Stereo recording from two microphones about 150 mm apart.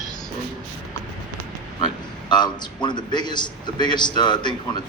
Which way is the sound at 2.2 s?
30° left (ahead or behind).